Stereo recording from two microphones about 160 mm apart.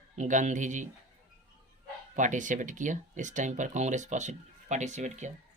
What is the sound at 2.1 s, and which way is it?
Speech, 50° right (ahead or behind).